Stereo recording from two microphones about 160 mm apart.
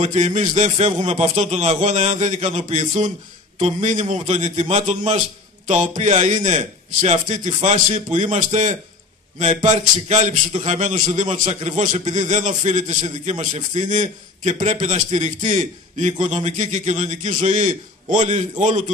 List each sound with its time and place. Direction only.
0.0 s a man's voice: 45° right (ahead or behind)